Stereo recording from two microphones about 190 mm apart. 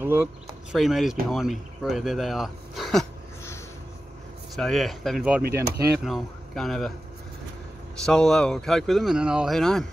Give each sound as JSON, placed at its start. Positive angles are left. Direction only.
{"t": 0.0, "sound": "speech", "side_deg": -10}
{"t": 4.6, "sound": "speech", "side_deg": 0}
{"t": 5.6, "sound": "speech", "side_deg": -60}
{"t": 6.0, "sound": "a man's voice", "side_deg": 0}
{"t": 8.0, "sound": "speech", "side_deg": 5}